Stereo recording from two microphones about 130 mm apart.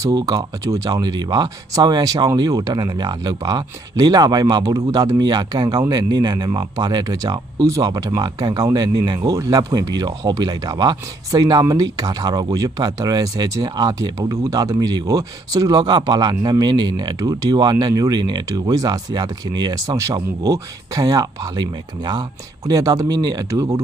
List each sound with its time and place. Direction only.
0.0 s speech: 30° right (ahead or behind)